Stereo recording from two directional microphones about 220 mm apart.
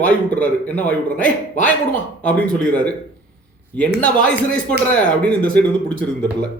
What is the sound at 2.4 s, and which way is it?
Speech, 5° left (ahead or behind).